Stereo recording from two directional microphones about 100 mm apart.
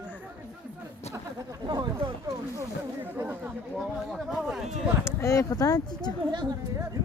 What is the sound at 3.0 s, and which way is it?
Speech, 20° right (ahead or behind).